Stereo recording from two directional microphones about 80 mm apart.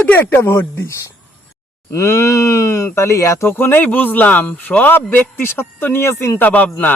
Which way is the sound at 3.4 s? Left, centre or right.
Left.